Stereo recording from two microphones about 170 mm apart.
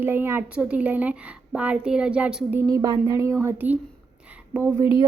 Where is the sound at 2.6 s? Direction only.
20° right (ahead or behind).